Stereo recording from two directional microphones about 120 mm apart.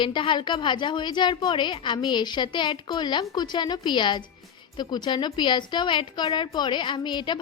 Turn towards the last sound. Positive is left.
turn(degrees=40)  # may be behind; listen again after turning